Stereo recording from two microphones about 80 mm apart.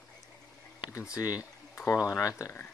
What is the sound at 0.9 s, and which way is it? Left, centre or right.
Speech, left.